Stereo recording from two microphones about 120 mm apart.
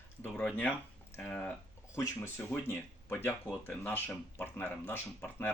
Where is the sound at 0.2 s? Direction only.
10° left (ahead or behind).